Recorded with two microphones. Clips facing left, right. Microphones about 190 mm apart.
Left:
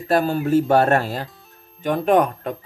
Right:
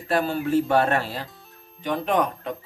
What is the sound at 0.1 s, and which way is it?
Speech, 40° left (ahead or behind).